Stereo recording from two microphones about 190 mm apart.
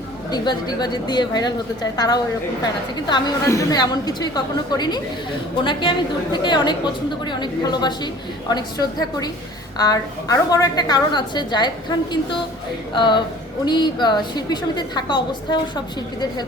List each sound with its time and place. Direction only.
0.3 s a woman's voice: 20° left (ahead or behind)
6.3 s a woman's voice: 25° left (ahead or behind)